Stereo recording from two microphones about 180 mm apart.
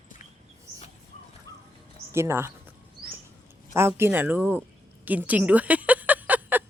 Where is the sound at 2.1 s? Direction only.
15° right (ahead or behind).